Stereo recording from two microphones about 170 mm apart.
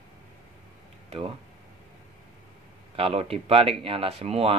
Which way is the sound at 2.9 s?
35° right (ahead or behind).